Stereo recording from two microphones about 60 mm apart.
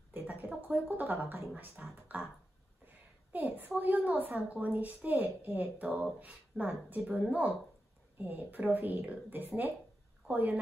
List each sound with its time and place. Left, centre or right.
0.1 s speech: right
3.3 s a woman's voice: right